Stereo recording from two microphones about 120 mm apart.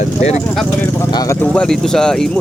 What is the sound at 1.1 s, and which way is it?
Speech, 30° left (ahead or behind).